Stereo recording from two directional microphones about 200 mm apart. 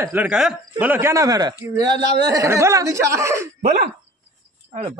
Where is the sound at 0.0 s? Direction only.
10° right (ahead or behind).